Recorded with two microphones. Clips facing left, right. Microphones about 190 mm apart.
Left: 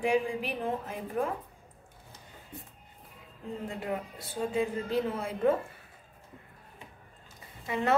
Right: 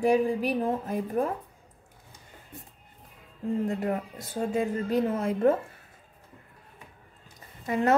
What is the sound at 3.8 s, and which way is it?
A woman's voice, 45° right (ahead or behind).